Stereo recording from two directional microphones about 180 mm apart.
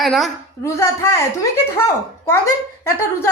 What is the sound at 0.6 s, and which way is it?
Speech, 15° left (ahead or behind).